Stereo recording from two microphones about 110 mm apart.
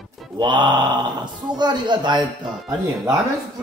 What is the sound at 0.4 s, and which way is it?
Mantra, 45° right (ahead or behind).